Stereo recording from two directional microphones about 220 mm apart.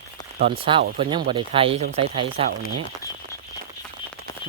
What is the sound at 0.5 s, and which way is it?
Speech, 25° right (ahead or behind).